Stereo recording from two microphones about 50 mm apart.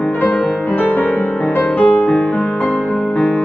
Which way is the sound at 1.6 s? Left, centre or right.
Left.